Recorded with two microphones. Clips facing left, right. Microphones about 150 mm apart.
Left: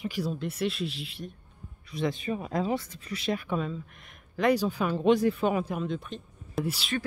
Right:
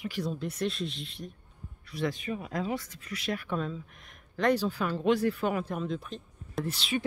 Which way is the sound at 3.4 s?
5° left (ahead or behind).